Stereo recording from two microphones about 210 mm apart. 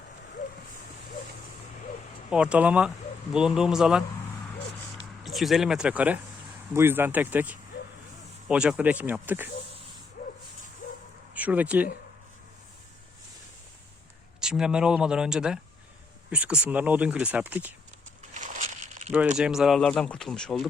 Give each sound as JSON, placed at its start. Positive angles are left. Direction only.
{"t": 2.3, "sound": "speech", "side_deg": -5}
{"t": 5.2, "sound": "speech", "side_deg": 0}
{"t": 10.2, "sound": "bow-wow", "side_deg": 45}
{"t": 11.3, "sound": "speech", "side_deg": -5}
{"t": 14.4, "sound": "speech", "side_deg": -5}
{"t": 18.3, "sound": "a sound", "side_deg": -35}
{"t": 19.4, "sound": "speech", "side_deg": -5}